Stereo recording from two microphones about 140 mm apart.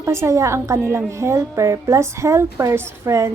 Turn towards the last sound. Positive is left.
turn(degrees=-20)  # may be behind; listen again after turning